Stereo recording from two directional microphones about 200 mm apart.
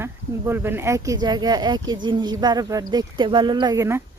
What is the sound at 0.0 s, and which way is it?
Speech, 10° right (ahead or behind).